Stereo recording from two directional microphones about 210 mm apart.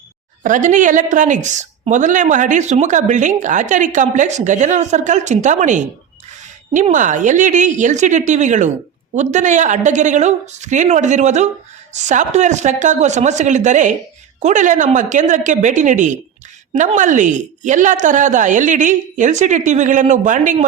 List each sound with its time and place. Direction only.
0.4 s a woman's voice: 35° right (ahead or behind)